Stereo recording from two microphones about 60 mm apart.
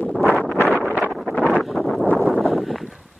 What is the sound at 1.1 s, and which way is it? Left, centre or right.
Wind noise, centre.